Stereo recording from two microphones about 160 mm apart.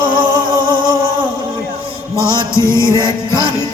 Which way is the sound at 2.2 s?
20° left (ahead or behind).